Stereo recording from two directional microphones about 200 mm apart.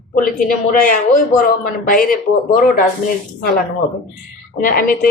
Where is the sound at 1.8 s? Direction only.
45° left (ahead or behind).